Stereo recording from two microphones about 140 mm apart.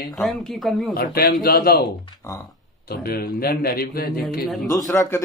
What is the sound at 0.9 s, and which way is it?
Speech, 90° left.